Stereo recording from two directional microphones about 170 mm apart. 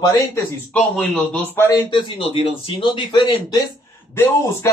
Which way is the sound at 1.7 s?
30° left (ahead or behind).